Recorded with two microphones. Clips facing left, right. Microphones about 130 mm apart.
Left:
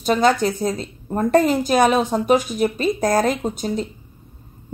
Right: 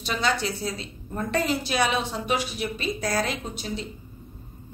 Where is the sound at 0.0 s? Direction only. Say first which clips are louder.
Left 9 dB; 45° left (ahead or behind).